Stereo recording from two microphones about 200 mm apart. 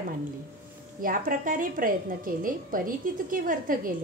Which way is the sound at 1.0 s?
45° right (ahead or behind).